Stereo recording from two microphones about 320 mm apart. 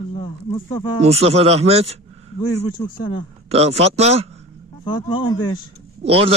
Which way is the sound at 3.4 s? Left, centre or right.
Centre.